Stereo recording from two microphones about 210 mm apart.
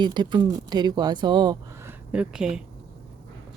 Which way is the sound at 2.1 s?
5° right (ahead or behind).